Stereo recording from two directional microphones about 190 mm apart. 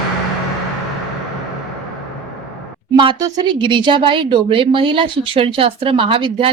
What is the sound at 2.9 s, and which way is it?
A woman's voice, 25° right (ahead or behind).